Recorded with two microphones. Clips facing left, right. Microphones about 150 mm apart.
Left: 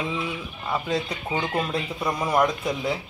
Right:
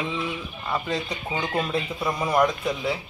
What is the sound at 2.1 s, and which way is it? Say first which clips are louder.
Speech: even; 10° left (ahead or behind).